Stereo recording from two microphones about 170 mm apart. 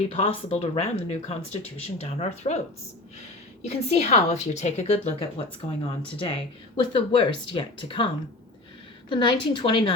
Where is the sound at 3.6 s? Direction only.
40° left (ahead or behind).